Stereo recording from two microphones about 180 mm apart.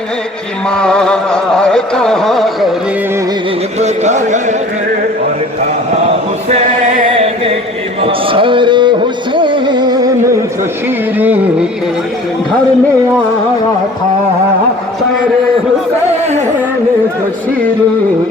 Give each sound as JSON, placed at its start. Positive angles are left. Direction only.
{"t": 0.8, "sound": "carnatic music", "side_deg": 5}
{"t": 3.8, "sound": "a sound", "side_deg": -40}
{"t": 8.0, "sound": "music", "side_deg": -30}